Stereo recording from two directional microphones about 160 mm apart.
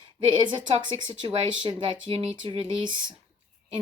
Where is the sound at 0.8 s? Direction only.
30° right (ahead or behind).